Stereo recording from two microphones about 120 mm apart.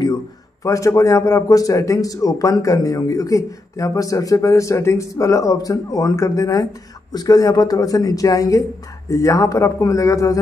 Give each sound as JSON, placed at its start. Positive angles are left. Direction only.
{"t": 0.7, "sound": "a man's voice", "side_deg": 25}